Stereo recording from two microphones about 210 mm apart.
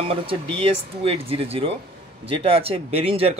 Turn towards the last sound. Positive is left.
turn(degrees=-25)  # may be behind; listen again after turning